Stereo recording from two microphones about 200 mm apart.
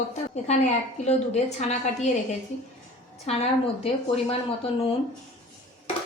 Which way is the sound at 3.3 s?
30° left (ahead or behind).